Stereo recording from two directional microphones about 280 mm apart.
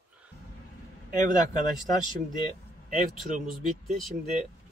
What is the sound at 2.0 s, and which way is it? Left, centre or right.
Speech, centre.